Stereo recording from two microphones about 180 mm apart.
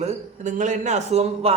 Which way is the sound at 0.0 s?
40° right (ahead or behind).